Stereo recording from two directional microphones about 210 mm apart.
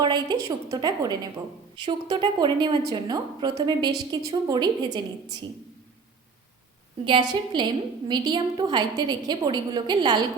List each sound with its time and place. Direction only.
0.0 s a sound: 20° right (ahead or behind)
0.4 s a woman's voice: 15° right (ahead or behind)
7.0 s a woman's voice: 20° right (ahead or behind)